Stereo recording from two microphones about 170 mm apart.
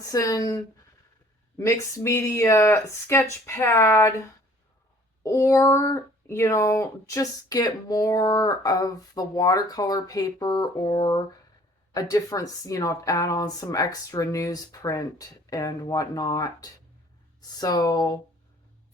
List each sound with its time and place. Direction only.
0.0 s speech: 20° left (ahead or behind)
5.2 s speech: 15° left (ahead or behind)